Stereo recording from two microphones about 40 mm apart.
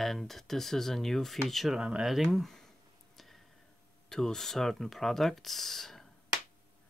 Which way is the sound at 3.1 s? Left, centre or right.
Centre.